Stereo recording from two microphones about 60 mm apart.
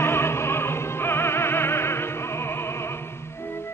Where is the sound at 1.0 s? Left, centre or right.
Left.